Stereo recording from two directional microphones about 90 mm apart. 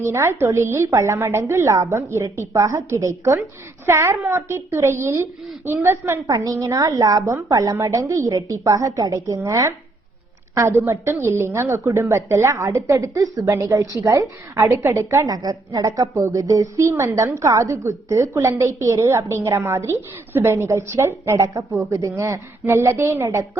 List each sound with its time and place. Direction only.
0.0 s a woman's voice: 30° right (ahead or behind)
6.2 s a woman's voice: 40° right (ahead or behind)